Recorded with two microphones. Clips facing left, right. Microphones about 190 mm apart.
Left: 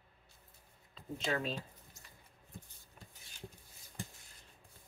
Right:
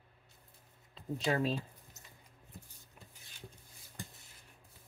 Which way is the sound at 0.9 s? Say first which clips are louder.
Right 4 dB; 35° right (ahead or behind).